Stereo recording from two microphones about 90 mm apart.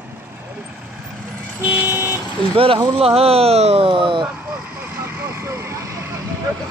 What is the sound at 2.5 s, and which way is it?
Speech, 90° right.